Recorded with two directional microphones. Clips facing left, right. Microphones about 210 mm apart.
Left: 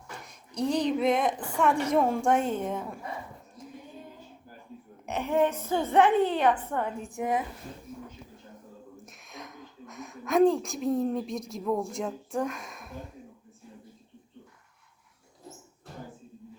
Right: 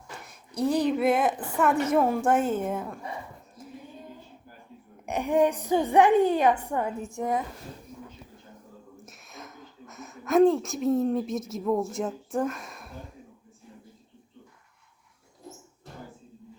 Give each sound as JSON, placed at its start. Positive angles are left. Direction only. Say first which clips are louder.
{"t": 0.5, "sound": "a woman's voice", "louder": "right 2 dB", "side_deg": -5}
{"t": 5.0, "sound": "a woman's voice", "louder": "right 3 dB", "side_deg": -10}
{"t": 9.0, "sound": "a woman's voice", "louder": "even", "side_deg": 0}